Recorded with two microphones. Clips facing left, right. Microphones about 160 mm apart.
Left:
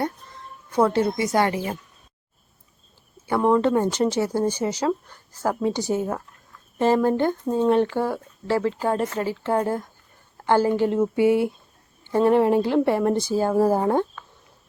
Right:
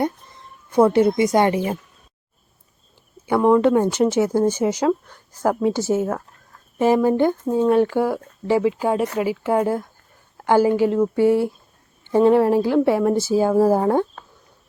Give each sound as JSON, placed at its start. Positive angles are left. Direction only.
{"t": 0.0, "sound": "speech", "side_deg": -15}
{"t": 3.2, "sound": "speech", "side_deg": -5}
{"t": 4.4, "sound": "speech", "side_deg": 10}
{"t": 4.6, "sound": "a woman's voice", "side_deg": -10}
{"t": 12.1, "sound": "speech", "side_deg": -15}
{"t": 12.5, "sound": "a woman's voice", "side_deg": -5}